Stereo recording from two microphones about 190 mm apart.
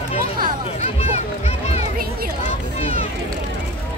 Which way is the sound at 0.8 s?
35° left (ahead or behind).